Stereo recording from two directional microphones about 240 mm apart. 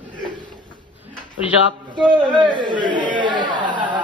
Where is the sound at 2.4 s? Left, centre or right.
Centre.